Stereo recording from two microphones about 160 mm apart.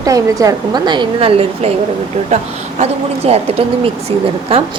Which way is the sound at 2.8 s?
40° right (ahead or behind).